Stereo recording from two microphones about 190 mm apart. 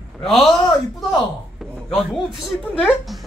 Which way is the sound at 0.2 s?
Centre (ahead or behind).